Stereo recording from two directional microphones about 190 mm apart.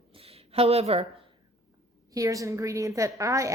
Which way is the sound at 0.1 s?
30° right (ahead or behind).